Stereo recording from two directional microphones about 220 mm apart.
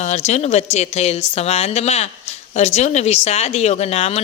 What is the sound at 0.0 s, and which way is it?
Speech, 30° left (ahead or behind).